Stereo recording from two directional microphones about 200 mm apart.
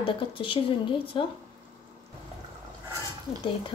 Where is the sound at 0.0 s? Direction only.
25° left (ahead or behind).